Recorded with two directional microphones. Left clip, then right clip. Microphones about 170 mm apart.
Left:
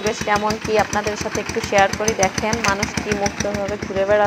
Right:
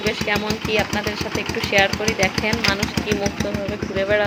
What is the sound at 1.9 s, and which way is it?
Speech, 5° right (ahead or behind).